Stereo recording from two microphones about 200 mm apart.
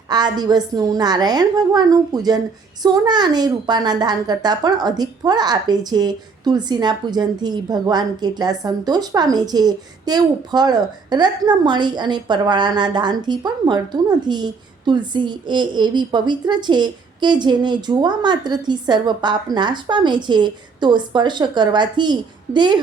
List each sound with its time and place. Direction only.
0.1 s a child's voice: 20° right (ahead or behind)